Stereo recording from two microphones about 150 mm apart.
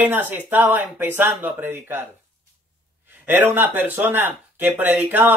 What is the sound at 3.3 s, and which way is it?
Speech, 15° right (ahead or behind).